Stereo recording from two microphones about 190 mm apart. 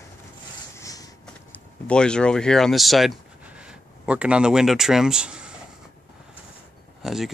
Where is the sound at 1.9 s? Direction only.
5° left (ahead or behind).